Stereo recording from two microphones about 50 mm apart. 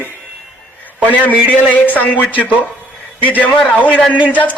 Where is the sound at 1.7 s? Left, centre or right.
Left.